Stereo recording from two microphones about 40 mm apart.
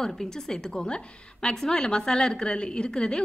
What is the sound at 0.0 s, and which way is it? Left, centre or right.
A woman's voice, centre.